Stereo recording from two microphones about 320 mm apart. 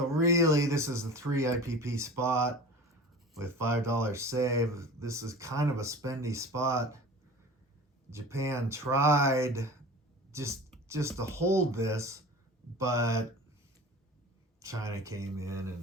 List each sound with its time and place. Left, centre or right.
0.1 s speech: centre
8.1 s speech: centre
14.6 s speech: centre